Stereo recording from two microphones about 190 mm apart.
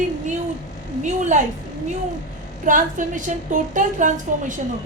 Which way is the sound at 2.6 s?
45° right (ahead or behind).